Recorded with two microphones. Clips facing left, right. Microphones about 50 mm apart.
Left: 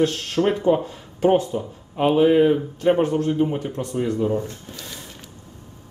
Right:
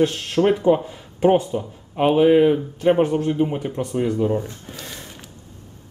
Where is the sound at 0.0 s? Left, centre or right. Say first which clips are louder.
Right 2 dB; centre.